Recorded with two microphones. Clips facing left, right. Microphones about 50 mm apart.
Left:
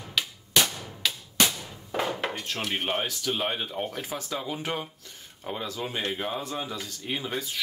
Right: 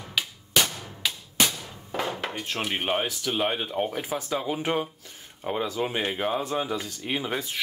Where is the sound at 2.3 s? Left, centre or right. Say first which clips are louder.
Right 2 dB; centre.